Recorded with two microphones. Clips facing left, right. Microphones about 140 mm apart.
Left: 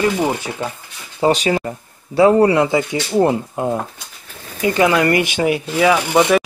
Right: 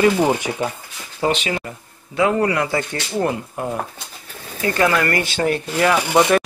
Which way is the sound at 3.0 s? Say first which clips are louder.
Left 7 dB; 35° left (ahead or behind).